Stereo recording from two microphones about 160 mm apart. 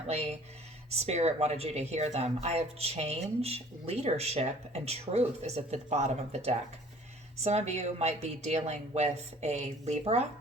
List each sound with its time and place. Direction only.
0.1 s speech: 45° right (ahead or behind)